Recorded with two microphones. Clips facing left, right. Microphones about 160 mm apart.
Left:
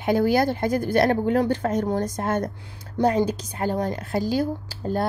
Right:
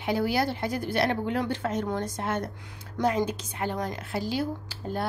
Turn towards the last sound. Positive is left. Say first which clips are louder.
# left 6 dB
turn(degrees=40)  # may be behind; listen again after turning